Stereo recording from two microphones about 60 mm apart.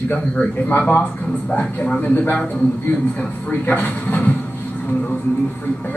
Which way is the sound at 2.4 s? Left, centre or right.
Left.